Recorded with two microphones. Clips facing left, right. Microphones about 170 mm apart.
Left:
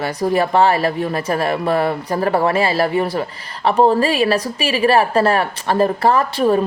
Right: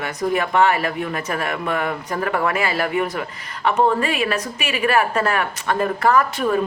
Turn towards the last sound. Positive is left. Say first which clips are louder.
# left 3 dB
turn(degrees=30)  # may be behind; listen again after turning